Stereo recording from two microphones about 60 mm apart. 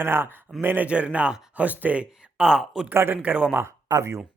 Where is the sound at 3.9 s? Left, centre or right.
Right.